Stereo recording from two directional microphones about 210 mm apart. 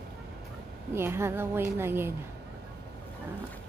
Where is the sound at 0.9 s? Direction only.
10° right (ahead or behind).